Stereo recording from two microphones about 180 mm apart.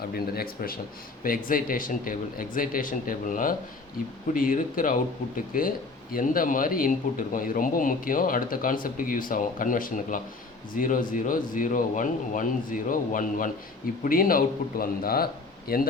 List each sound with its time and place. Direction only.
0.1 s a man's voice: 55° left (ahead or behind)